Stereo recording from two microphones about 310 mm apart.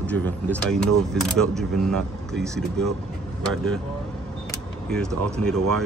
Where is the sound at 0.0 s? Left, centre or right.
Centre.